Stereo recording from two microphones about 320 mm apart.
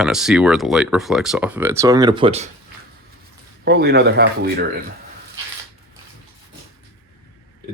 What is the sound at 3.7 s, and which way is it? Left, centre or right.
Speech, right.